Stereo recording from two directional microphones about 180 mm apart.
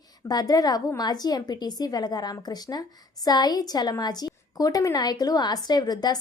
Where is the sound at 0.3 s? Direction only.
20° left (ahead or behind).